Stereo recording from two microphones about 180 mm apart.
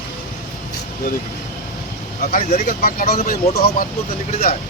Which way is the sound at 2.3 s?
45° left (ahead or behind).